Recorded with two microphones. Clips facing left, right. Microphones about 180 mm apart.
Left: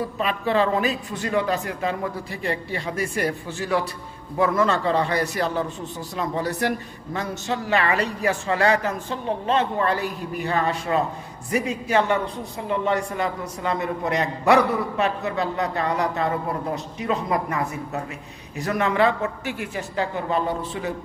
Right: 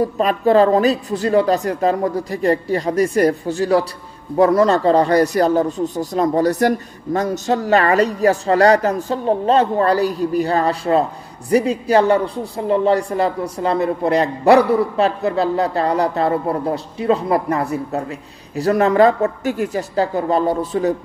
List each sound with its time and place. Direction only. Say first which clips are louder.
0.0 s speech: right 9 dB; 40° right (ahead or behind)